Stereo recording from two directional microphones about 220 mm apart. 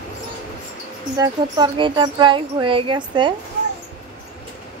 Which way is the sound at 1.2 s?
20° right (ahead or behind).